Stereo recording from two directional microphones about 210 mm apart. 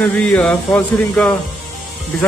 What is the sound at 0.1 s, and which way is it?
A man's voice, 5° left (ahead or behind).